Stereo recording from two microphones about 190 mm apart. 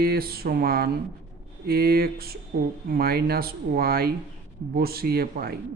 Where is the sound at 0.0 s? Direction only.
50° right (ahead or behind).